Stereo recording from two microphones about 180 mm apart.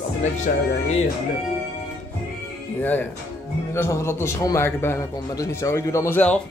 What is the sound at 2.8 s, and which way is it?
A man's voice, 10° left (ahead or behind).